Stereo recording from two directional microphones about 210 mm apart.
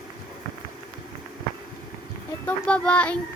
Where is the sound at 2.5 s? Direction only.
5° left (ahead or behind).